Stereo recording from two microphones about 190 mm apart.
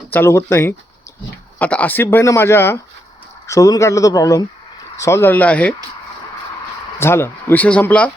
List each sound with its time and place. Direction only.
0.1 s speech: 10° left (ahead or behind)
7.0 s speech: 15° left (ahead or behind)